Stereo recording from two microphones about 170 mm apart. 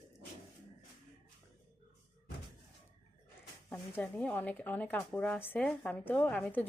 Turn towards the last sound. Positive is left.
turn(degrees=10)  # may be behind; listen again after turning